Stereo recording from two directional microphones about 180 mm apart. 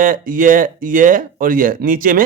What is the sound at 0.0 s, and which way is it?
A man's voice, 50° right (ahead or behind).